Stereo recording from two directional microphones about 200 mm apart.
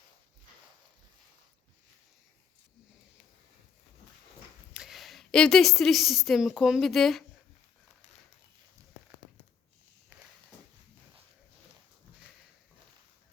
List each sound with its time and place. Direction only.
4.7 s a woman's voice: centre (ahead or behind)
10.1 s walk: 15° right (ahead or behind)